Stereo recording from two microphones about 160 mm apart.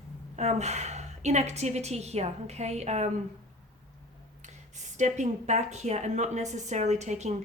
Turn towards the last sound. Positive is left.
turn(degrees=-45)  # may be behind; listen again after turning